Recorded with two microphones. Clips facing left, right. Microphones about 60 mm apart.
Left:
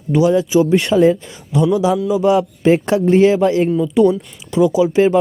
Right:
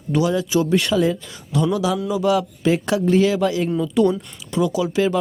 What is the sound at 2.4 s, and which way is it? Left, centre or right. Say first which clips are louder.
Speech: left 6 dB; left.